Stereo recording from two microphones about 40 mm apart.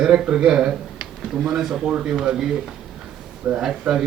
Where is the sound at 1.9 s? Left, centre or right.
Right.